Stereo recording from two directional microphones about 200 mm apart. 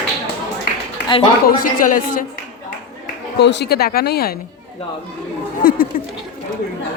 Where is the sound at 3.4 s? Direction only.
55° left (ahead or behind).